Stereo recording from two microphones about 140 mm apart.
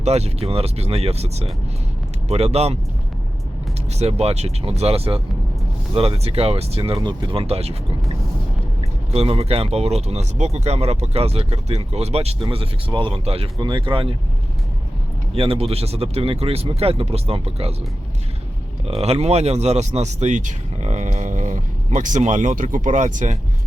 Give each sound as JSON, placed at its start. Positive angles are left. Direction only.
{"t": 0.0, "sound": "speech", "side_deg": -50}
{"t": 3.9, "sound": "speech", "side_deg": -50}
{"t": 9.1, "sound": "speech", "side_deg": -45}
{"t": 15.4, "sound": "speech", "side_deg": -45}
{"t": 18.9, "sound": "speech", "side_deg": -45}